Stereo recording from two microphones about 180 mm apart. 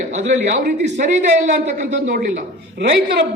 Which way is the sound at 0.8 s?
40° right (ahead or behind).